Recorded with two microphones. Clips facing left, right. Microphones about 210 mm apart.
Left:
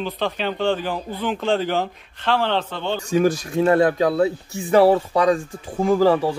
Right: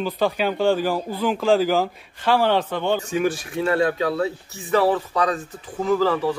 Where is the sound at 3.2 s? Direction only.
40° left (ahead or behind).